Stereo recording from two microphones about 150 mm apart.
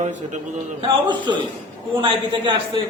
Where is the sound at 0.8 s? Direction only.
30° right (ahead or behind).